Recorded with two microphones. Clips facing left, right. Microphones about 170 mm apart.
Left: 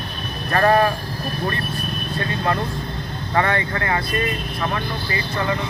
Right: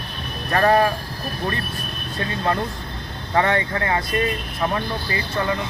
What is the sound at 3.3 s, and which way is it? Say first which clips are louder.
Speech: right 1 dB; 15° right (ahead or behind).